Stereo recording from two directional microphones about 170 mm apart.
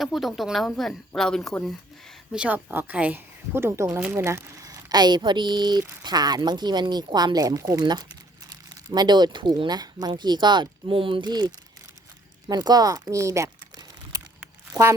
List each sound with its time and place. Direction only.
0.0 s speech: centre (ahead or behind); by 14.9 s 15° right (ahead or behind)